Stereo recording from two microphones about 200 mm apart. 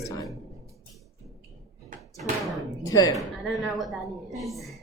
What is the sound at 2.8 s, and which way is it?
Speech, 15° left (ahead or behind).